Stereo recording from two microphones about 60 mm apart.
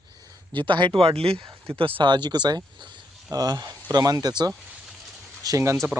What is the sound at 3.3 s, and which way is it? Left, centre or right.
Speech, right.